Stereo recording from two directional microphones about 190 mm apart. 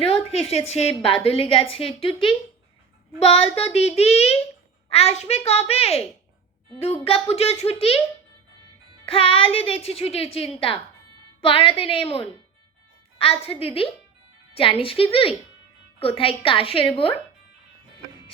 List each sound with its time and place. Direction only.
0.0 s a sound: 30° left (ahead or behind)
0.7 s a woman's voice: 35° left (ahead or behind)
3.2 s a woman's voice: 35° left (ahead or behind)
7.0 s a woman's voice: 30° left (ahead or behind)
9.0 s a woman's voice: 30° left (ahead or behind)